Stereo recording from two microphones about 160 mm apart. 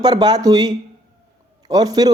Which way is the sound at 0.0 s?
25° right (ahead or behind).